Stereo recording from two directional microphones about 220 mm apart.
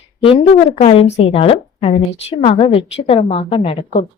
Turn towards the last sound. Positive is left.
turn(degrees=25)  # may be behind; listen again after turning